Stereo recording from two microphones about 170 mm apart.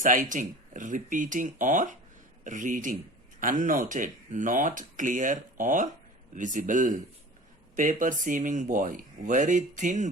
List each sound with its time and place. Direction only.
0.0 s speech: 50° right (ahead or behind)